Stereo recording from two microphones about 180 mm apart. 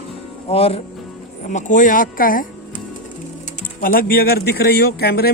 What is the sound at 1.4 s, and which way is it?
Speech, 45° left (ahead or behind).